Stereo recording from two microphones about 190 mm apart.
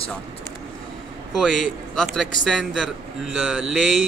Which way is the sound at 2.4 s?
Centre (ahead or behind).